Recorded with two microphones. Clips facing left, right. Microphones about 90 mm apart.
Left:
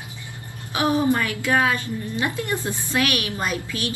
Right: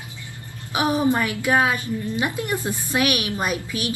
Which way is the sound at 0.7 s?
20° right (ahead or behind).